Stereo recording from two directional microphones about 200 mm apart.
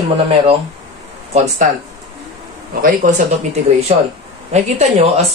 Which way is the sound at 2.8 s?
40° right (ahead or behind).